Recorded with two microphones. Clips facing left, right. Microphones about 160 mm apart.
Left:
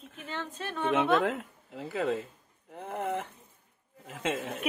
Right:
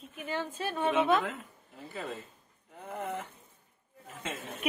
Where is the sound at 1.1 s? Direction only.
65° left (ahead or behind); by 2.2 s 90° left.